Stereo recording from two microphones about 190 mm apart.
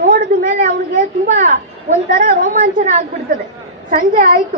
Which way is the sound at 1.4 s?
40° right (ahead or behind).